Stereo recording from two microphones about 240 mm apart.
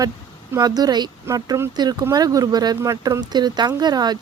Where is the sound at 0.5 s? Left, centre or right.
Centre.